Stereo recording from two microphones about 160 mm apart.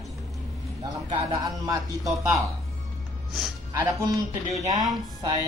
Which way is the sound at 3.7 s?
20° right (ahead or behind).